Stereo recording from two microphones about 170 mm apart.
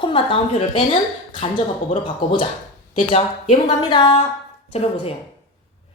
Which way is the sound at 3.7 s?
30° left (ahead or behind).